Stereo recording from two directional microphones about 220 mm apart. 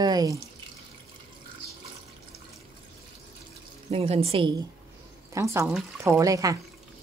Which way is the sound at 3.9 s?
25° right (ahead or behind).